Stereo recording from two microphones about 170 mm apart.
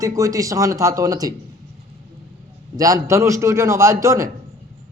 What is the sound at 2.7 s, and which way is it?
A man's voice, 20° right (ahead or behind).